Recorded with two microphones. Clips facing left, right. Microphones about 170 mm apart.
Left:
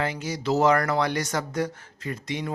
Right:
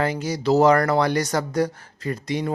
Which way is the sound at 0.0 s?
40° right (ahead or behind).